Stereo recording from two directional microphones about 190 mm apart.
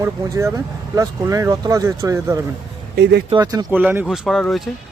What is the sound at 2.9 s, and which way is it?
Speech, 60° right (ahead or behind).